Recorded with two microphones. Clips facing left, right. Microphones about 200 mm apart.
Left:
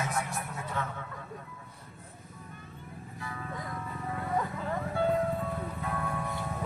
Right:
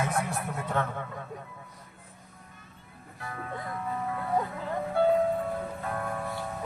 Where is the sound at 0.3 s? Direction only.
55° right (ahead or behind).